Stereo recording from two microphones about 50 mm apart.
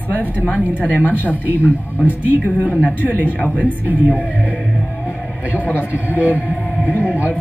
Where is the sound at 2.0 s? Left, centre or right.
Right.